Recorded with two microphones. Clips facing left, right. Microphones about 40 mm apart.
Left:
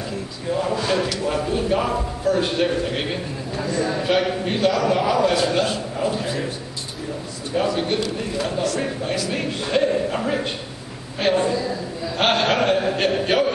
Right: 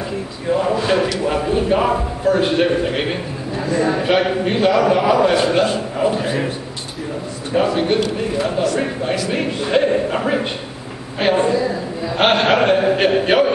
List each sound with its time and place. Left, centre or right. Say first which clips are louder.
0.5 s a man's voice: right 5 dB; centre
7.5 s a man's voice: right 5 dB; right